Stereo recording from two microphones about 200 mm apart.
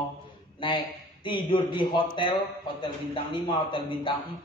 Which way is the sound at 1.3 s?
25° left (ahead or behind).